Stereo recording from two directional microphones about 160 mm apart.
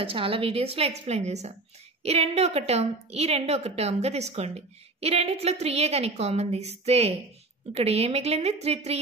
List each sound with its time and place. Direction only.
0.0 s a woman's voice: 35° right (ahead or behind)